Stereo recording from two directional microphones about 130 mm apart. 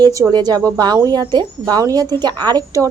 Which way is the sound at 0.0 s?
30° right (ahead or behind).